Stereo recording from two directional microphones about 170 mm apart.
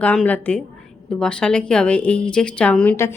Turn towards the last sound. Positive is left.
turn(degrees=15)  # may be behind; listen again after turning